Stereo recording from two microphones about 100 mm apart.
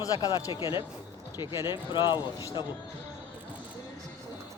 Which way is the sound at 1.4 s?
50° left (ahead or behind).